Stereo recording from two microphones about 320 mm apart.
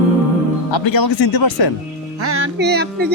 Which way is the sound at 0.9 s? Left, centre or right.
Left.